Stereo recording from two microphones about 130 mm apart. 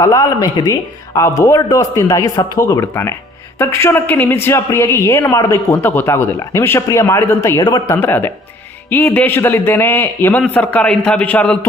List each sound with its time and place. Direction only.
0.0 s a woman's voice: 25° left (ahead or behind); by 11.6 s 10° left (ahead or behind)